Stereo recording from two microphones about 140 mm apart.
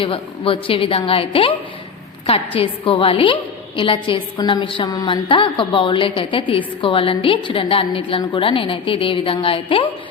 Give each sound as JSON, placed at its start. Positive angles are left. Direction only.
{"t": 0.0, "sound": "a woman's voice", "side_deg": 40}
{"t": 2.6, "sound": "a woman's voice", "side_deg": 40}